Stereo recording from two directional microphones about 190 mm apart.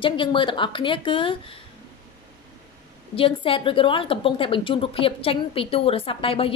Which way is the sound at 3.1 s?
30° left (ahead or behind).